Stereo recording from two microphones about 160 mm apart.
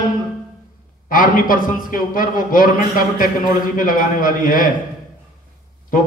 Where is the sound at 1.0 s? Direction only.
55° left (ahead or behind).